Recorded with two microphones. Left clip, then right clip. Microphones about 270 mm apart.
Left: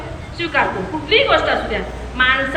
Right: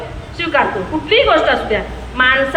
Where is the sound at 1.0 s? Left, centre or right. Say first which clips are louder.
Right 3 dB; centre.